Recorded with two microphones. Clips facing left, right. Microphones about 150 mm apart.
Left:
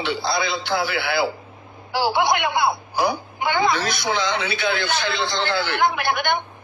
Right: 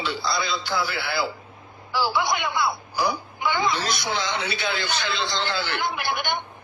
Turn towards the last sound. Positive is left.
turn(degrees=55)  # may be behind; listen again after turning